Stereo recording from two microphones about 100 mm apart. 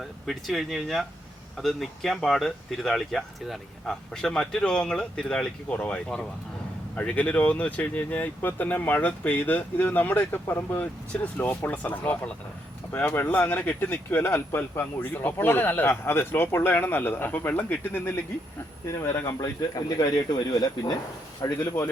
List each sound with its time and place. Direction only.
0.0 s speech: centre (ahead or behind); by 19.4 s 30° left (ahead or behind)
19.4 s speech: 40° left (ahead or behind)